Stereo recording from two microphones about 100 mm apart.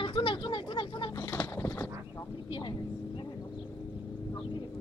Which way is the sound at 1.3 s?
25° left (ahead or behind).